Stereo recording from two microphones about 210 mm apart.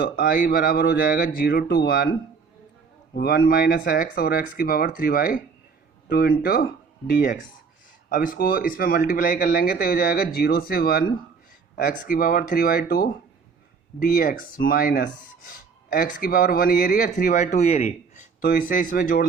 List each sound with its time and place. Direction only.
0.0 s speech: 45° left (ahead or behind)
3.2 s speech: 50° left (ahead or behind)